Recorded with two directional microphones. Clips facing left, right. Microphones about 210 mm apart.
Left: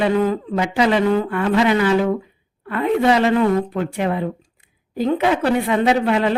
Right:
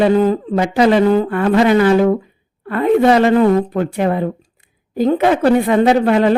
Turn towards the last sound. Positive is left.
turn(degrees=-45)  # may be behind; listen again after turning